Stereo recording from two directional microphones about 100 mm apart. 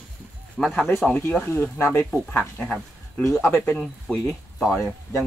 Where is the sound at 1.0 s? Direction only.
15° left (ahead or behind).